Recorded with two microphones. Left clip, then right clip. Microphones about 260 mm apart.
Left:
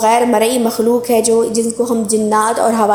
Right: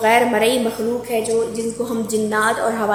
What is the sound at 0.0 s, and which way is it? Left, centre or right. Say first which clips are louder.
Speech: left 3 dB; left.